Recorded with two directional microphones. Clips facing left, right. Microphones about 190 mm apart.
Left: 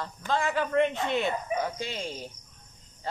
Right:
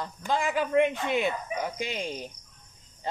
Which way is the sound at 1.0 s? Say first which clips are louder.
Even; 10° right (ahead or behind).